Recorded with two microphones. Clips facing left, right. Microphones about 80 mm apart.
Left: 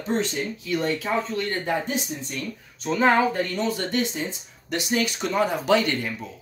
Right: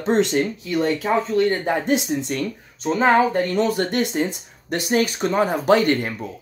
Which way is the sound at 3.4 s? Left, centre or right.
Right.